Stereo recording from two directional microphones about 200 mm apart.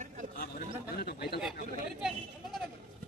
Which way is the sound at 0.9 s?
50° left (ahead or behind).